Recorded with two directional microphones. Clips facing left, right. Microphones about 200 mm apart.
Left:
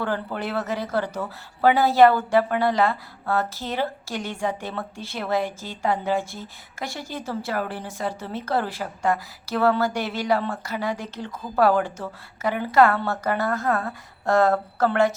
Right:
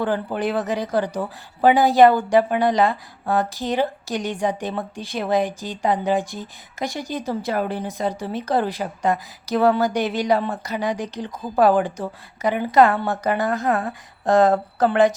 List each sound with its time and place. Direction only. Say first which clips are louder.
0.0 s speech: right 5 dB; 15° right (ahead or behind)